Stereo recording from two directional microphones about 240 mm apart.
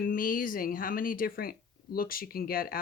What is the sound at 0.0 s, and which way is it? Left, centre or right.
Speech, left.